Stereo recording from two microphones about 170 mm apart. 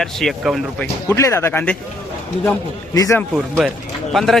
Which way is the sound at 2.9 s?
20° left (ahead or behind).